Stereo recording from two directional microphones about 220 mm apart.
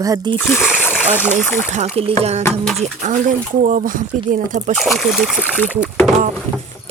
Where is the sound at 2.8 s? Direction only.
35° right (ahead or behind).